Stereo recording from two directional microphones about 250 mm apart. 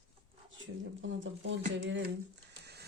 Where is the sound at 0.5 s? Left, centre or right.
Right.